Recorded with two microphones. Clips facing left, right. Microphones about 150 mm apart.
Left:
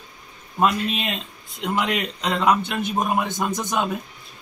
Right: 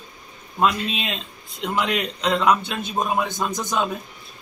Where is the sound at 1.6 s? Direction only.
5° left (ahead or behind).